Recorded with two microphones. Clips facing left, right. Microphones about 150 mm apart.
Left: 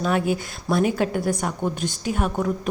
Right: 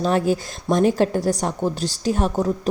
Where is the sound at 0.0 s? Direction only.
35° right (ahead or behind).